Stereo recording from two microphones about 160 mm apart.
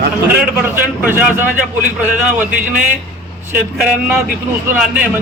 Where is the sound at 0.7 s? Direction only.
10° right (ahead or behind).